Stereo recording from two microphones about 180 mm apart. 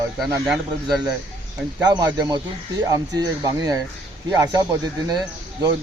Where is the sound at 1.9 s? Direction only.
25° right (ahead or behind).